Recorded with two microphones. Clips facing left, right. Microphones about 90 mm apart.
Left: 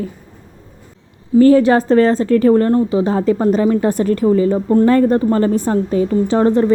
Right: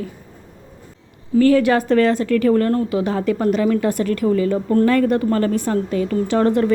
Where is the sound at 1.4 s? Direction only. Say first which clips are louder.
Left 4 dB; 30° left (ahead or behind).